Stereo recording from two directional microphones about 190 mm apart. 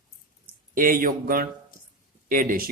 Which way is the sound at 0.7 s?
45° right (ahead or behind).